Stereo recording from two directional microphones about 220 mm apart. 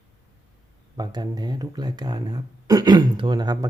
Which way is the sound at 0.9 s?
20° right (ahead or behind).